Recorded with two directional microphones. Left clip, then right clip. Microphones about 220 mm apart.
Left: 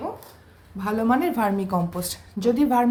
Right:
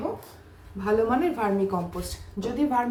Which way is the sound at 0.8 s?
50° left (ahead or behind).